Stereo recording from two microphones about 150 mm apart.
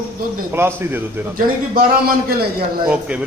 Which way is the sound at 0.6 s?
15° right (ahead or behind).